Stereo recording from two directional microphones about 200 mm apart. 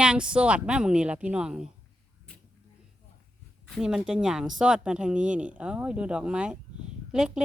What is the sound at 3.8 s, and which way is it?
Speech, 5° right (ahead or behind).